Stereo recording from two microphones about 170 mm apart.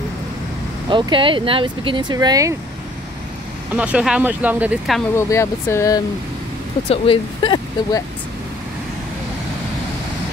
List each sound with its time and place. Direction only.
0.8 s speech: 30° right (ahead or behind)
3.7 s speech: 5° right (ahead or behind)
5.1 s speech: 15° left (ahead or behind)
6.9 s speech: 30° left (ahead or behind)